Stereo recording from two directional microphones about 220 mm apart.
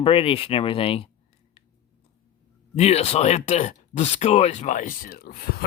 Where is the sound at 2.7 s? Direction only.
30° left (ahead or behind).